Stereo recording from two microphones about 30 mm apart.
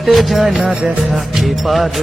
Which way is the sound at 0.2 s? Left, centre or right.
Centre.